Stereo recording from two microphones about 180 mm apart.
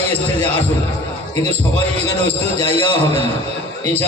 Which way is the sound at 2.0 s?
35° right (ahead or behind).